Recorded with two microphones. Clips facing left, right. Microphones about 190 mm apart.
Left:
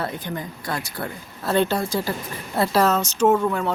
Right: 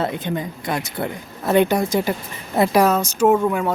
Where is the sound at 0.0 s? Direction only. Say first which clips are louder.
Right 5 dB; 20° right (ahead or behind).